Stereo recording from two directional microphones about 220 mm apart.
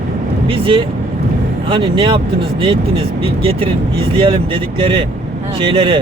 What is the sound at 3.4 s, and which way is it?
Speech, 25° right (ahead or behind).